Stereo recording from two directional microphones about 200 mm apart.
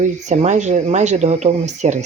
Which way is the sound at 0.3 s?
35° right (ahead or behind).